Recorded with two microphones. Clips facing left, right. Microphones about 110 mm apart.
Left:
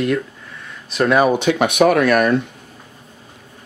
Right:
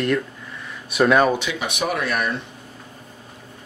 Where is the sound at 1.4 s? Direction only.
55° left (ahead or behind).